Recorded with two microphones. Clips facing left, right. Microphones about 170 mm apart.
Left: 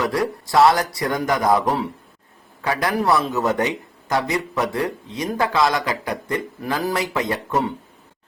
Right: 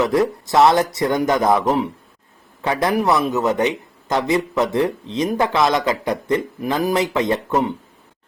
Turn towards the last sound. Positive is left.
turn(degrees=-20)  # may be behind; listen again after turning